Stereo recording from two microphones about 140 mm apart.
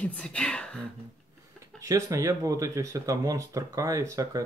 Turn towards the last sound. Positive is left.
turn(degrees=-25)  # may be behind; listen again after turning